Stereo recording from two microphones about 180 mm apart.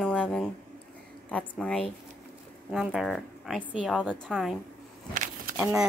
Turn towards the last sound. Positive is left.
turn(degrees=-45)  # may be behind; listen again after turning